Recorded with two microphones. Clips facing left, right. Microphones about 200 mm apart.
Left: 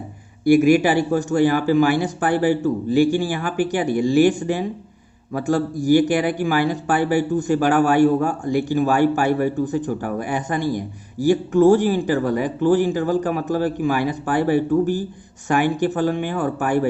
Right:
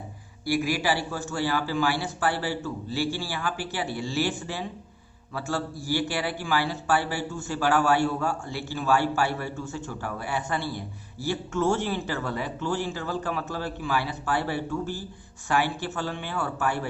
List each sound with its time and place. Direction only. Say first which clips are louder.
0.4 s a man's voice: left 12 dB; 20° left (ahead or behind)